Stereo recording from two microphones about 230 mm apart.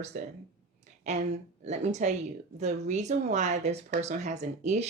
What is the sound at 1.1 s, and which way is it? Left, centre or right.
Speech, right.